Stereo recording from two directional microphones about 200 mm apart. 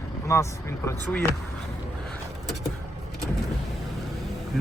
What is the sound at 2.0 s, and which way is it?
Vehicle, centre (ahead or behind).